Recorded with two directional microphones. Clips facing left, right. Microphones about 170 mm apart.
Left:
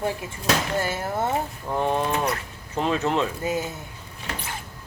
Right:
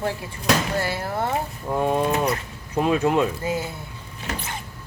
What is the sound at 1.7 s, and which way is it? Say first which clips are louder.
Speech: right 2 dB; 10° right (ahead or behind).